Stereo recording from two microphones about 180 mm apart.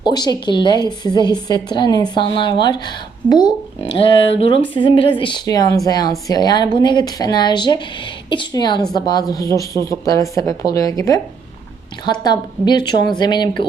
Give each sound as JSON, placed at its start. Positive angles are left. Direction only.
{"t": 0.0, "sound": "a woman's voice", "side_deg": 25}
{"t": 12.2, "sound": "a woman's voice", "side_deg": 25}